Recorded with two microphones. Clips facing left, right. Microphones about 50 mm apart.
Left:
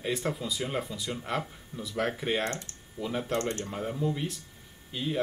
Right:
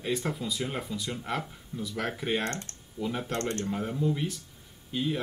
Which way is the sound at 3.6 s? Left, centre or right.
Centre.